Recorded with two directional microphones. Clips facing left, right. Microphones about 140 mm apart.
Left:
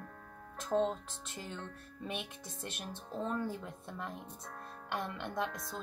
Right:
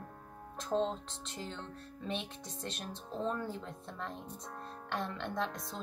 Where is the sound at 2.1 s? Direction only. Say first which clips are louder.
Right 3 dB; 10° left (ahead or behind).